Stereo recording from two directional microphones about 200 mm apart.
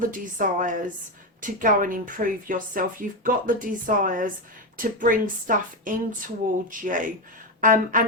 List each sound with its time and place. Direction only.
0.0 s speech: 40° right (ahead or behind)